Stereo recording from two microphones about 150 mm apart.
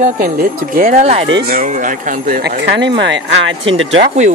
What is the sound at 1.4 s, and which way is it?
Speech, 75° right (ahead or behind).